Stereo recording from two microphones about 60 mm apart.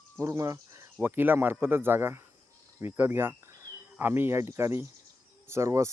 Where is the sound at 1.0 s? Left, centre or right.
Right.